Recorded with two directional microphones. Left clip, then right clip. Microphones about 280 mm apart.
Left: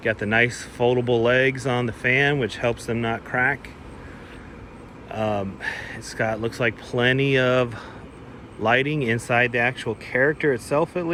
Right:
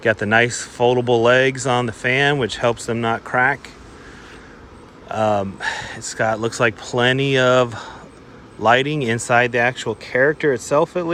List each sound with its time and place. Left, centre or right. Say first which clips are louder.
0.0 s speech: right 5 dB; centre
5.0 s speech: right 7 dB; centre